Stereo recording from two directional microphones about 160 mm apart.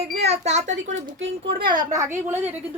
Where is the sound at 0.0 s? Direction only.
40° right (ahead or behind).